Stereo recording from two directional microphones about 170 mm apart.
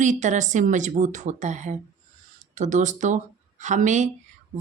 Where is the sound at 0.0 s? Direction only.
45° right (ahead or behind).